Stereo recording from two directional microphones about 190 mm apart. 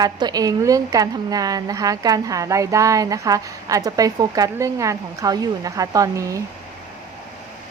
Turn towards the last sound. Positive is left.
turn(degrees=-15)  # may be behind; listen again after turning